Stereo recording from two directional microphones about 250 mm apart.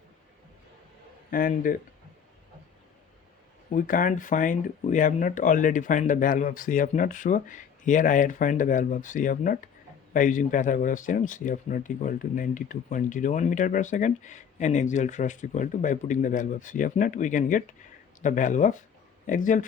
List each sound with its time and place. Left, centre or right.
1.3 s a man's voice: left
3.7 s a man's voice: left